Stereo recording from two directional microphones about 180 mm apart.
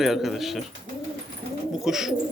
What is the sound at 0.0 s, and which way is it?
Speech, centre (ahead or behind).